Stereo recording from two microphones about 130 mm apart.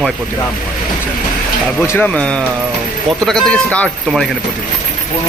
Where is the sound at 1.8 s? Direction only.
15° left (ahead or behind).